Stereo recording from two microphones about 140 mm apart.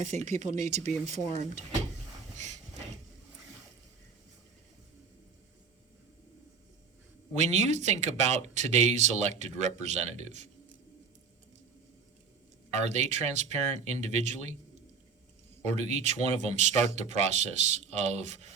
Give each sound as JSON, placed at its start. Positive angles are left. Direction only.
{"t": 0.0, "sound": "speech", "side_deg": -60}
{"t": 7.3, "sound": "speech", "side_deg": -55}
{"t": 12.7, "sound": "speech", "side_deg": -55}
{"t": 15.6, "sound": "speech", "side_deg": -50}